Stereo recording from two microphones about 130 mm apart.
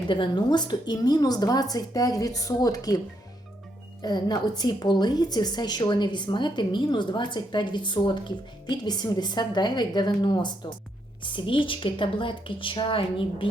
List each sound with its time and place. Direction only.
0.1 s a woman's voice: 35° left (ahead or behind)
4.0 s a woman's voice: 30° left (ahead or behind)